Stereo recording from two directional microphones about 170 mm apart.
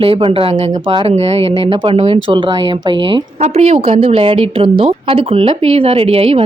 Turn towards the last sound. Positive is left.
turn(degrees=-35)  # may be behind; listen again after turning